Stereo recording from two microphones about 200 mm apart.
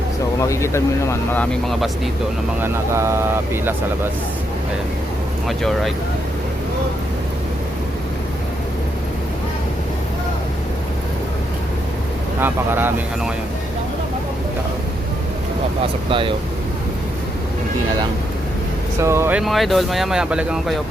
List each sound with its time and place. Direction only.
0.4 s speech: 15° left (ahead or behind)
2.6 s speech: 10° right (ahead or behind)
5.5 s speech: centre (ahead or behind)
12.4 s speech: 10° right (ahead or behind)
16.0 s speech: 25° right (ahead or behind)
19.0 s speech: 15° right (ahead or behind)